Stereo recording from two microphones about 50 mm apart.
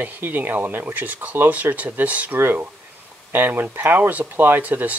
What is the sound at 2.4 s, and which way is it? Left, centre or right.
Speech, right.